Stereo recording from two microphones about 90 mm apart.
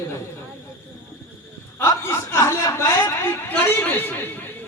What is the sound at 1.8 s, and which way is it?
Speech, 35° left (ahead or behind).